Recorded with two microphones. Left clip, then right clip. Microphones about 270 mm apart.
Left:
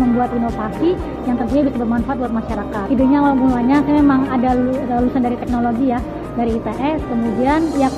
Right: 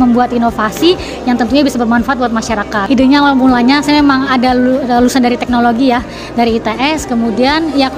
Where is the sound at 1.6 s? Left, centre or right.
Right.